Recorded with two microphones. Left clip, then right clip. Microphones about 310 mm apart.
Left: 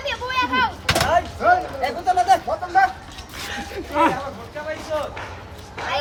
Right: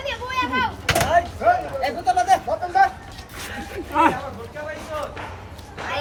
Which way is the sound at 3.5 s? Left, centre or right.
Centre.